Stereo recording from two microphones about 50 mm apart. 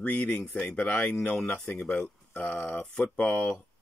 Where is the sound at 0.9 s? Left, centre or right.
Left.